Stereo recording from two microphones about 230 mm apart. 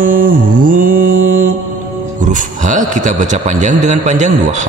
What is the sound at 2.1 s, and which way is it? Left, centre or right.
A man's voice, right.